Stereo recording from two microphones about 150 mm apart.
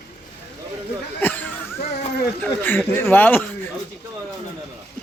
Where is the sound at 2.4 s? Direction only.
15° left (ahead or behind).